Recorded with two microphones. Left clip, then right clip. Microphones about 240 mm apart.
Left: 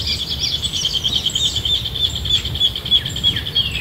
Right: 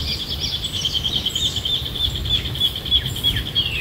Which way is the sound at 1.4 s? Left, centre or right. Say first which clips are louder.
Left 3 dB; left.